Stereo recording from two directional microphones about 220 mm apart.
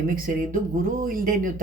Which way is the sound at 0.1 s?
40° right (ahead or behind).